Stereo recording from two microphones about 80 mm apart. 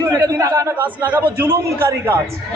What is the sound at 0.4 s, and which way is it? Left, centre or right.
Speech, right.